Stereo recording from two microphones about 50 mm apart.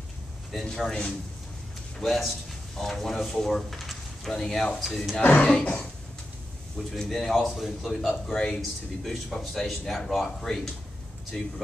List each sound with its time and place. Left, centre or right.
0.7 s speech: centre
2.0 s speech: centre
5.2 s speech: left
6.9 s speech: centre